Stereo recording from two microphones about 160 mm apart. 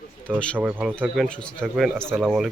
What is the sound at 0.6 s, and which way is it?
Speech, 10° right (ahead or behind).